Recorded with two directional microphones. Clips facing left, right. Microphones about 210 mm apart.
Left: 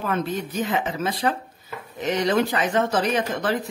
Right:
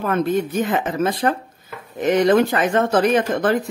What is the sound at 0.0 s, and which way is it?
Speech, 50° right (ahead or behind).